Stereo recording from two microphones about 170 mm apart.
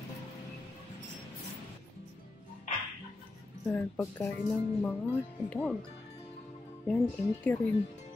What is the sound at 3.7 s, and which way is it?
A woman's voice, 10° left (ahead or behind).